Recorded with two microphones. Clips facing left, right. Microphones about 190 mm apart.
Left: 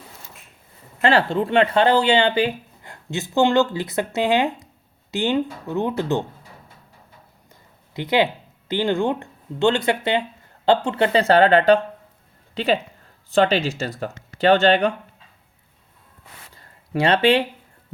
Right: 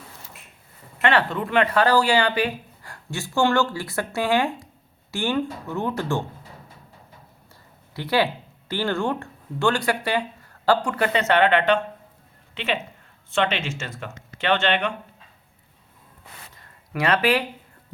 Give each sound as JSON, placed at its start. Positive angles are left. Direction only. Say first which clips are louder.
{"t": 1.0, "sound": "speech", "louder": "left 3 dB", "side_deg": 30}
{"t": 7.9, "sound": "speech", "louder": "left 3 dB", "side_deg": 20}
{"t": 16.6, "sound": "a sound", "louder": "left 5 dB", "side_deg": 30}